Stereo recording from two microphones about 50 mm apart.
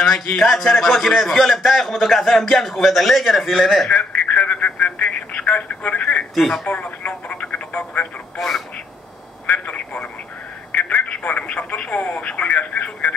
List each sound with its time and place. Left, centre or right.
0.0 s a man's voice: centre
3.9 s telephone: left
6.3 s a man's voice: centre
6.7 s telephone: left
8.4 s a sound: centre
9.5 s telephone: left
11.1 s speech: left